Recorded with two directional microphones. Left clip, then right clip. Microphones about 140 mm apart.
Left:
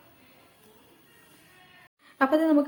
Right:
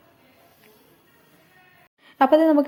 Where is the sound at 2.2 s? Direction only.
35° right (ahead or behind).